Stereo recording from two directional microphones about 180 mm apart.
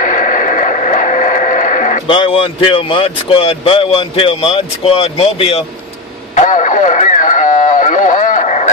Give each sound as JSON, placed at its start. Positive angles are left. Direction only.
{"t": 0.0, "sound": "a sound", "side_deg": 45}
{"t": 2.0, "sound": "speech", "side_deg": 30}
{"t": 6.3, "sound": "radio", "side_deg": 45}